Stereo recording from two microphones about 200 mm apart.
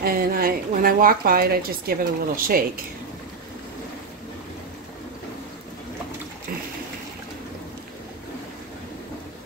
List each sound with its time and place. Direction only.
0.0 s a woman's voice: 45° right (ahead or behind)